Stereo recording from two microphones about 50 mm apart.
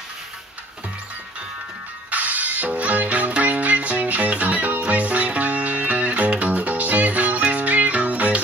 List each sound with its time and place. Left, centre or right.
2.0 s music: right